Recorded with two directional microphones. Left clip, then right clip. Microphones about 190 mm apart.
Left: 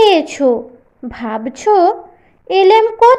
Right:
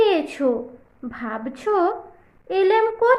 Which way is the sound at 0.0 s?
25° left (ahead or behind).